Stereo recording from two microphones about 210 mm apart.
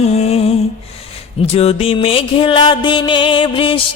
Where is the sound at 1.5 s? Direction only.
30° left (ahead or behind).